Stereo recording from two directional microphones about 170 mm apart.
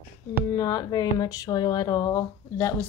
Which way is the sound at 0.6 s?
20° left (ahead or behind).